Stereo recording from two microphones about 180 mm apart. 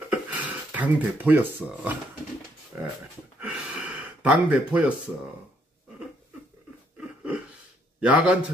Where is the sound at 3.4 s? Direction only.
5° right (ahead or behind).